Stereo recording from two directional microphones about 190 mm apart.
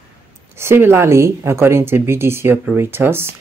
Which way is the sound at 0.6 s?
15° right (ahead or behind).